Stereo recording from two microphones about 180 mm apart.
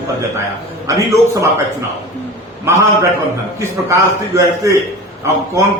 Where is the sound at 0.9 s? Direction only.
20° right (ahead or behind).